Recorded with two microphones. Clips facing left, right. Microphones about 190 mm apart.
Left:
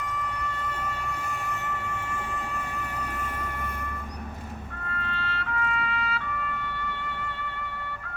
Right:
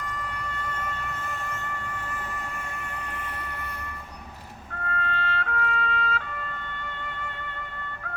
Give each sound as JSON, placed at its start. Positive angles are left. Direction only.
{"t": 4.9, "sound": "music", "side_deg": -55}